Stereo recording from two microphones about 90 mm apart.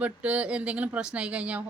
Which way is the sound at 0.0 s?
15° right (ahead or behind).